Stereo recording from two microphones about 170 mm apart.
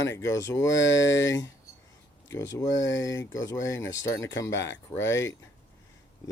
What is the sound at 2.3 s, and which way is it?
Speech, 20° left (ahead or behind).